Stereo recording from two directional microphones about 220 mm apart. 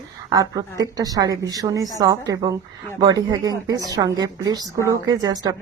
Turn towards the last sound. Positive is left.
turn(degrees=-15)  # may be behind; listen again after turning